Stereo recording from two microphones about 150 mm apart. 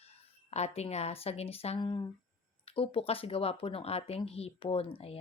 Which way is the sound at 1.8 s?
30° left (ahead or behind).